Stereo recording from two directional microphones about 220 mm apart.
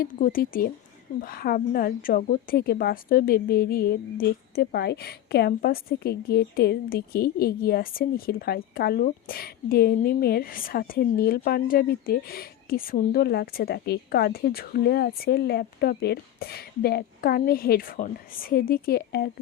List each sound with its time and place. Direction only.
0.0 s a woman's voice: 40° left (ahead or behind)